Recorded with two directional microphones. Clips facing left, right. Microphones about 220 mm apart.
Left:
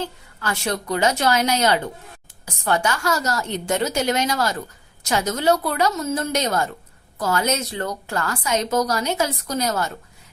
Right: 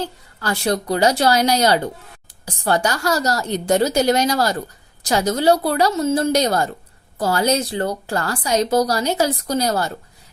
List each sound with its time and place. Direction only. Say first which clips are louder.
0.0 s a woman's voice: right 2 dB; 35° right (ahead or behind)